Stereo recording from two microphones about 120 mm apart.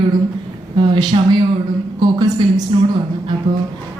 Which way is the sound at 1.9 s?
35° right (ahead or behind).